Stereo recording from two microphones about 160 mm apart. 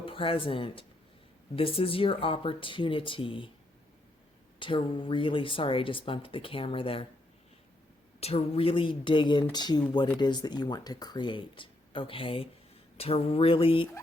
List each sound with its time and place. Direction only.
0.0 s speech: 35° left (ahead or behind)
4.6 s speech: 30° left (ahead or behind)
8.2 s speech: 40° left (ahead or behind)